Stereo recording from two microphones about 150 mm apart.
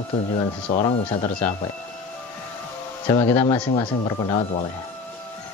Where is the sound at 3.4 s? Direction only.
30° left (ahead or behind).